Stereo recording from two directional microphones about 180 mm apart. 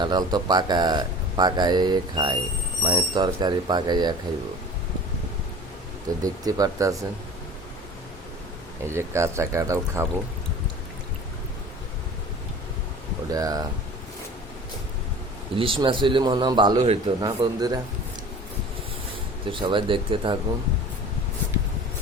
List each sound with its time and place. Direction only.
0.0 s speech: 25° right (ahead or behind)
6.2 s speech: 20° right (ahead or behind)
8.8 s speech: 15° right (ahead or behind)
13.3 s speech: 20° right (ahead or behind)
15.5 s speech: 30° right (ahead or behind)
19.5 s speech: 25° right (ahead or behind)